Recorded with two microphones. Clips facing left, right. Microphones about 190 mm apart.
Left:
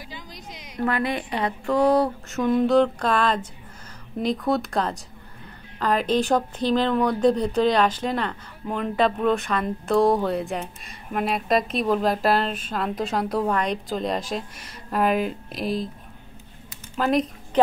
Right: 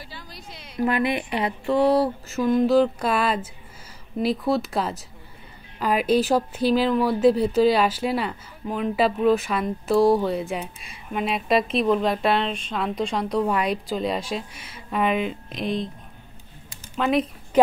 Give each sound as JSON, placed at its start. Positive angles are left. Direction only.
{"t": 0.1, "sound": "a sound", "side_deg": 15}
{"t": 0.7, "sound": "speech", "side_deg": -15}
{"t": 16.9, "sound": "speech", "side_deg": 0}